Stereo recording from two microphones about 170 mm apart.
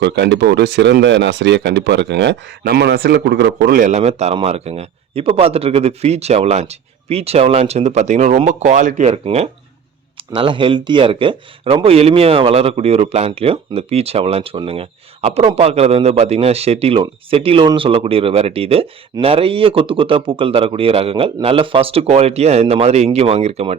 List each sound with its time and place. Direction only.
0.0 s speech: 90° right
3.8 s speech: 45° right (ahead or behind)